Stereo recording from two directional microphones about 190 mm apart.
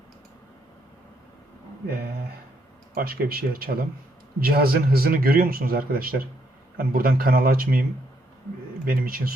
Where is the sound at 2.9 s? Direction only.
50° right (ahead or behind).